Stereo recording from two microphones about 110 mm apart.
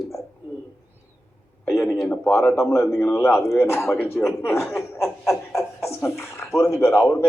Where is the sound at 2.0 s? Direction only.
20° left (ahead or behind).